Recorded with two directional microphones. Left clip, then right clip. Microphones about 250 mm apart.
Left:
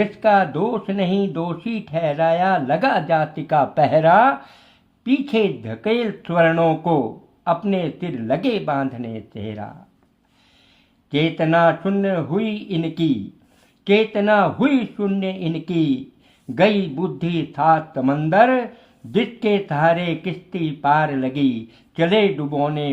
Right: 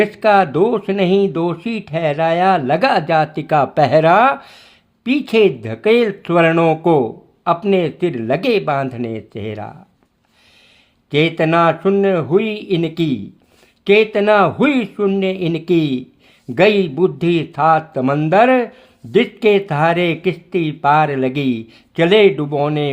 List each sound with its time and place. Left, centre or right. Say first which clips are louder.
0.0 s speech: right 4 dB; right
11.1 s speech: right 4 dB; right